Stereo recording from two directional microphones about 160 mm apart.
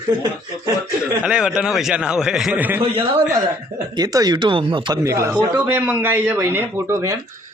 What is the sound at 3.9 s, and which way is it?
Speech, 25° right (ahead or behind).